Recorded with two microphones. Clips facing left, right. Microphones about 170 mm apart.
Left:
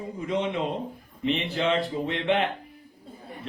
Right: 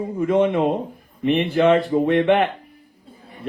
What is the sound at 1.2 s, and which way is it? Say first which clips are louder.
Speech: right 9 dB; 55° right (ahead or behind).